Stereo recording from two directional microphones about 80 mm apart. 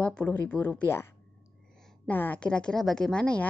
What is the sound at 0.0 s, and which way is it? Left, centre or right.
Speech, centre.